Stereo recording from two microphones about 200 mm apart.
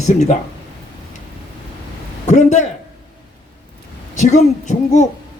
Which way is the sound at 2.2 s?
35° left (ahead or behind).